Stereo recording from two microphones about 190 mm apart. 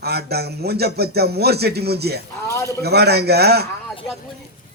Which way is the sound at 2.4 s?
15° left (ahead or behind).